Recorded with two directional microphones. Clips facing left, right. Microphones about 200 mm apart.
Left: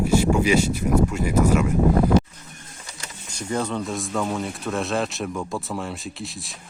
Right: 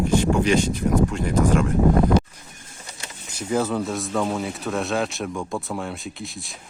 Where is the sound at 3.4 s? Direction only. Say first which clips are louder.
Right 3 dB; 5° right (ahead or behind).